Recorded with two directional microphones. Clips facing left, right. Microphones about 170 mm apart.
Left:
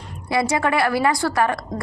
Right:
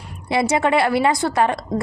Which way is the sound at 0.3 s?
25° right (ahead or behind).